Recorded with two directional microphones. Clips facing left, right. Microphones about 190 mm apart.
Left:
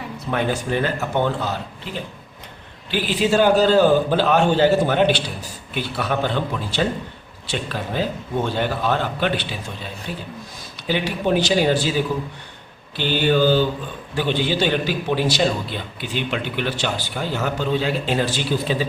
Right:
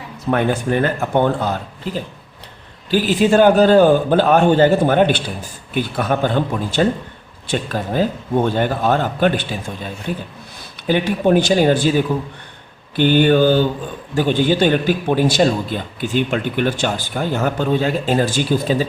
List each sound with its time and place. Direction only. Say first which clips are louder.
0.3 s a man's voice: right 5 dB; 50° right (ahead or behind)
13.0 s a man's voice: right 6 dB; 55° right (ahead or behind)